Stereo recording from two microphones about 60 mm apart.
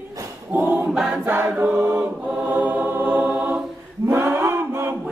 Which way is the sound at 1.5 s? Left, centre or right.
Right.